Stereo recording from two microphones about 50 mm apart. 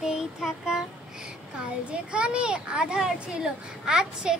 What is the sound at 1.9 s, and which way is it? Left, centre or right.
A child's voice, right.